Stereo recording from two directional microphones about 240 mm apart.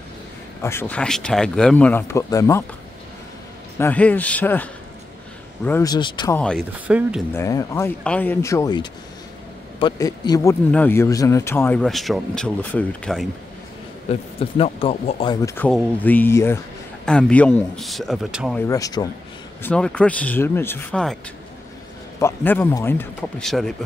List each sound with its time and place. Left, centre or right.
0.6 s speech: centre
3.7 s speech: centre
5.7 s speech: centre
6.3 s speech: centre
7.3 s speech: centre
14.1 s speech: left
15.4 s speech: centre
18.7 s speech: centre
22.2 s speech: centre